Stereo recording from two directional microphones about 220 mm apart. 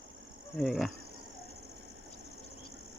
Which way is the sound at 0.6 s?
Centre (ahead or behind).